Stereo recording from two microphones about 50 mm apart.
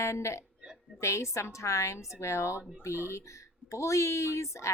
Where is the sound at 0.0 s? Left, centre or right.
Left.